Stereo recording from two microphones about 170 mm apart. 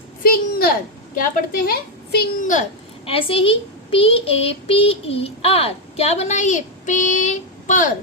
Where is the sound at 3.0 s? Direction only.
30° left (ahead or behind); by 7.9 s 50° left (ahead or behind).